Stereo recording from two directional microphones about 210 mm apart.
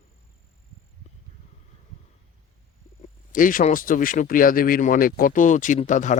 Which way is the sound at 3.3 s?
40° left (ahead or behind).